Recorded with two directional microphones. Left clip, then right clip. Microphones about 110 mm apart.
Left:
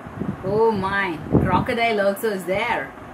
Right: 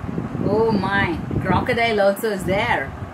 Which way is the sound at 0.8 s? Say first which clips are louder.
Right 2 dB; 25° right (ahead or behind).